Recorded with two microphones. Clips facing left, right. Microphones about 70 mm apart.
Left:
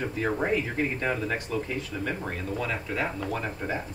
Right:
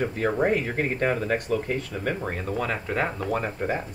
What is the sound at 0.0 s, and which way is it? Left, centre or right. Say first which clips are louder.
Speech: right 4 dB; right.